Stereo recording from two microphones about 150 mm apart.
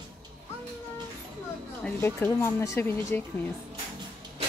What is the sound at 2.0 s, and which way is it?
Speech, 15° left (ahead or behind).